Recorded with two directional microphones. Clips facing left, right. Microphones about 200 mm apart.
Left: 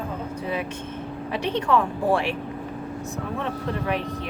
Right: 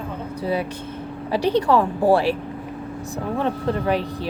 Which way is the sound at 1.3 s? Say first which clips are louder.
Right 5 dB; 35° right (ahead or behind).